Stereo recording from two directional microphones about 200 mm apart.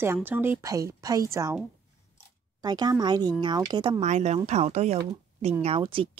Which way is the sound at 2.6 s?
20° right (ahead or behind).